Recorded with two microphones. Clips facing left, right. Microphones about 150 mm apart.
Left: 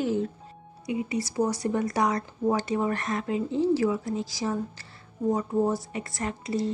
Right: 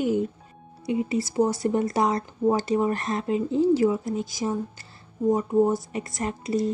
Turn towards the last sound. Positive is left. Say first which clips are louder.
# right 3 dB
turn(degrees=-20)  # may be behind; listen again after turning